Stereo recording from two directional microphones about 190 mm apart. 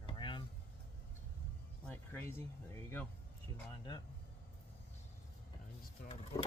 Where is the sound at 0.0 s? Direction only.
25° left (ahead or behind).